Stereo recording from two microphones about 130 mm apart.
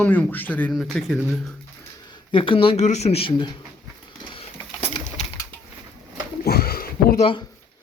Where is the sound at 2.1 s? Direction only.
40° left (ahead or behind).